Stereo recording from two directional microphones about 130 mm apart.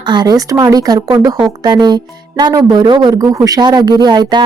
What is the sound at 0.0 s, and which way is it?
Speech, 35° right (ahead or behind).